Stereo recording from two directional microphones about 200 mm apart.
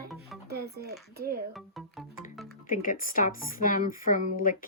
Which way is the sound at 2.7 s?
45° left (ahead or behind).